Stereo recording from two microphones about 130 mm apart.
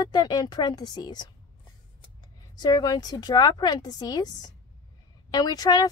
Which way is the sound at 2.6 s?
30° left (ahead or behind).